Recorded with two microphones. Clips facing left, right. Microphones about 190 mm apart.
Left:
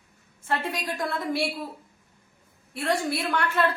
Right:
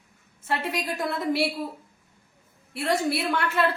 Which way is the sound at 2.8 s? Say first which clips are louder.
Right 1 dB; 25° right (ahead or behind).